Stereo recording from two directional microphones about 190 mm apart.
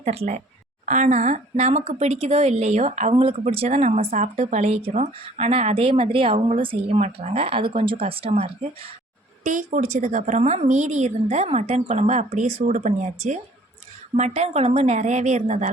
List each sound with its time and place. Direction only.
0.0 s a woman's voice: 35° right (ahead or behind)
9.4 s a woman's voice: 45° right (ahead or behind)